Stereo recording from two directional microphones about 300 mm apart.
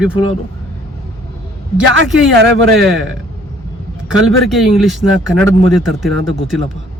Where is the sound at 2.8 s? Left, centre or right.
Centre.